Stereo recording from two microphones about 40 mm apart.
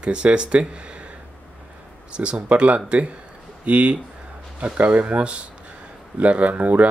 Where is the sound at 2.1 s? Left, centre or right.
Right.